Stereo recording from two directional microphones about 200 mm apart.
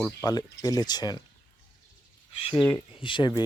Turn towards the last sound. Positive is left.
turn(degrees=25)  # may be behind; listen again after turning